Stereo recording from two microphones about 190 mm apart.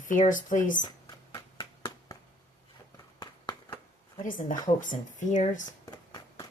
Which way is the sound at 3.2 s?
20° left (ahead or behind).